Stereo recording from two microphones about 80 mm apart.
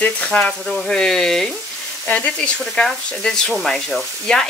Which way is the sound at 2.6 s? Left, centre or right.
Centre.